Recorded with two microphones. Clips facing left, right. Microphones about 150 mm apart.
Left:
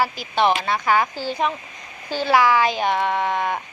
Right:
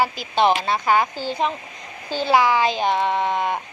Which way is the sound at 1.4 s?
25° right (ahead or behind).